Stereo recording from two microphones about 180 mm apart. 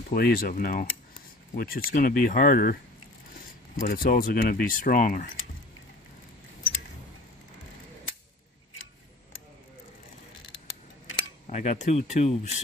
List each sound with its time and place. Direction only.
0.1 s speech: 55° left (ahead or behind)
3.8 s speech: 50° left (ahead or behind)
11.4 s speech: 40° left (ahead or behind)